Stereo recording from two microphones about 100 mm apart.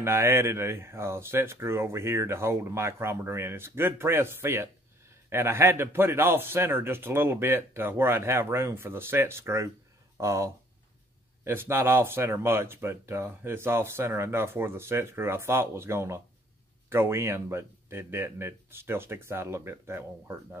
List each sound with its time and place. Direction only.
0.0 s speech: 30° right (ahead or behind)